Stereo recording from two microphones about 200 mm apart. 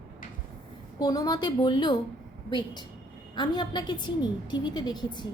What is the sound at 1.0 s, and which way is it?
A woman's voice, 20° left (ahead or behind).